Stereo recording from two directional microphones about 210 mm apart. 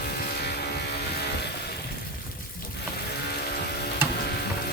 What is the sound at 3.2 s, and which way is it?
Vehicle, 50° left (ahead or behind).